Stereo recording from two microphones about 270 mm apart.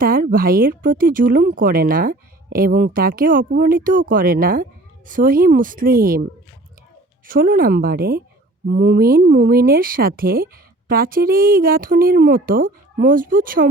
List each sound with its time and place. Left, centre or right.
0.0 s speech: right
7.3 s speech: right